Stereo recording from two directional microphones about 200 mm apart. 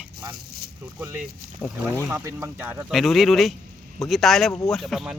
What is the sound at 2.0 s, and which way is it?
Speech, 10° right (ahead or behind).